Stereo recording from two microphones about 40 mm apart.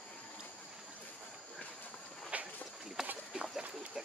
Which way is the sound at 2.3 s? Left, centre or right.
Right.